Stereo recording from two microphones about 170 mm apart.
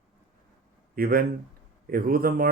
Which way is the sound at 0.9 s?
60° right (ahead or behind).